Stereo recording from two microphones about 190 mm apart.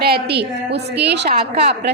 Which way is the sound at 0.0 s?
55° right (ahead or behind).